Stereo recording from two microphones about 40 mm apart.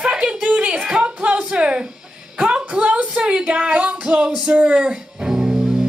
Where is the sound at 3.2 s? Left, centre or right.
Right.